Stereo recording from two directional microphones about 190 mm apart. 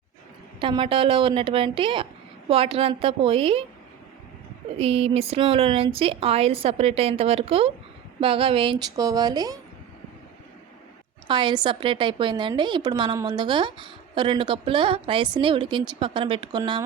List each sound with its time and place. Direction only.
0.6 s a woman's voice: 25° right (ahead or behind)
4.8 s a woman's voice: 30° right (ahead or behind)
11.3 s a woman's voice: 25° right (ahead or behind)